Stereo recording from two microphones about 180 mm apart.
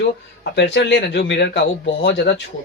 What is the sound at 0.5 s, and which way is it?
Speech, 75° left (ahead or behind).